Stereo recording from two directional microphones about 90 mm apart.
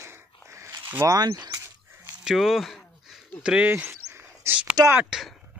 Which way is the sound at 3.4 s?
10° right (ahead or behind).